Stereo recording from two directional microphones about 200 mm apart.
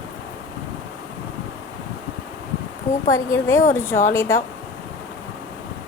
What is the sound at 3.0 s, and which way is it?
A woman's voice, 15° left (ahead or behind).